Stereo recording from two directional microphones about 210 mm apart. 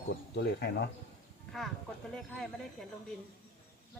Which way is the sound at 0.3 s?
50° left (ahead or behind).